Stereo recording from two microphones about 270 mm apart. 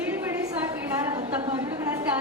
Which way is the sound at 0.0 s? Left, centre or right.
Centre.